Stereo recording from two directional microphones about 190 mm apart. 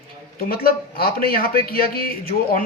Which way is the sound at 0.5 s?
55° left (ahead or behind).